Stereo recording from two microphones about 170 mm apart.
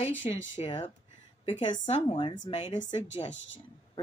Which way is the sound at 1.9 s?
35° left (ahead or behind).